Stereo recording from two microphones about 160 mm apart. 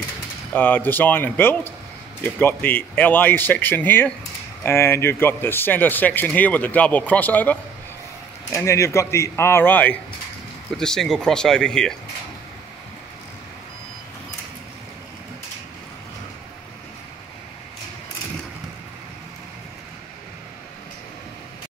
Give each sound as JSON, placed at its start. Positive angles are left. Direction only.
{"t": 0.5, "sound": "speech", "side_deg": 10}